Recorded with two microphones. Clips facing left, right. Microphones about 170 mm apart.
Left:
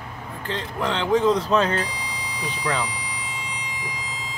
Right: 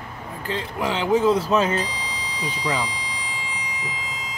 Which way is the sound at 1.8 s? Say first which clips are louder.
Right 1 dB; 10° left (ahead or behind).